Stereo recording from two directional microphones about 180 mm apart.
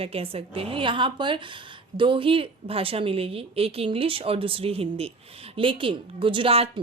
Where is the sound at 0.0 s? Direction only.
30° right (ahead or behind).